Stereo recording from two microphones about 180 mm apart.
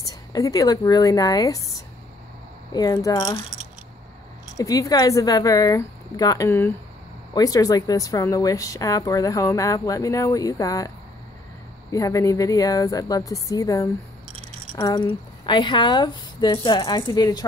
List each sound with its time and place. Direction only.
0.0 s speech: 20° left (ahead or behind)
4.6 s speech: 20° left (ahead or behind)
11.9 s speech: 20° left (ahead or behind)